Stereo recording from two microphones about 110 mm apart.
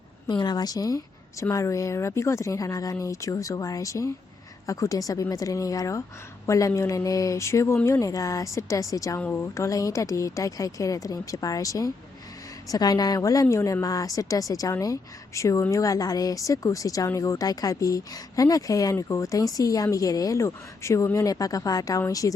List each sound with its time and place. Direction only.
0.3 s a woman's voice: 40° left (ahead or behind)